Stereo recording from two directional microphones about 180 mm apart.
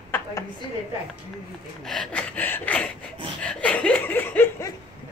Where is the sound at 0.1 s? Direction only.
15° left (ahead or behind).